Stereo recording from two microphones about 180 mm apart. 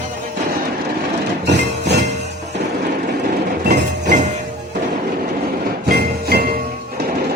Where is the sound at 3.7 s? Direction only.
45° right (ahead or behind).